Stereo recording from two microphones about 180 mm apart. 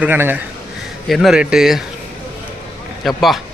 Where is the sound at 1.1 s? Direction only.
Centre (ahead or behind).